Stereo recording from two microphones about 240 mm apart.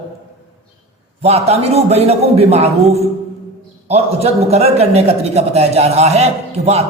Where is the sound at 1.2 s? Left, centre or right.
Right.